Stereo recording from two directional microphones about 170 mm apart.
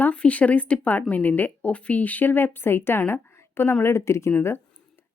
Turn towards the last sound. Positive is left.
turn(degrees=15)  # may be behind; listen again after turning